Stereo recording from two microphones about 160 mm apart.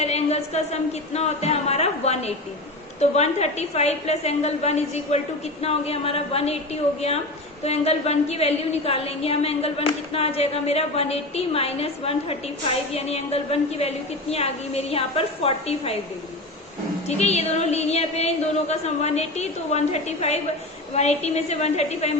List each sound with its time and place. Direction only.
0.0 s a woman's voice: 40° left (ahead or behind)
7.6 s a woman's voice: 40° left (ahead or behind)
17.1 s a woman's voice: 40° left (ahead or behind)